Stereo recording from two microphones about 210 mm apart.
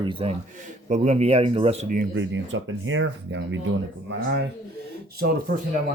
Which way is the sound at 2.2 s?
65° right (ahead or behind).